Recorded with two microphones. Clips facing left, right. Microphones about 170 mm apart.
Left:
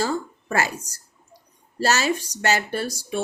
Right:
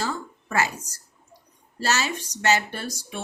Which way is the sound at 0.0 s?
40° left (ahead or behind).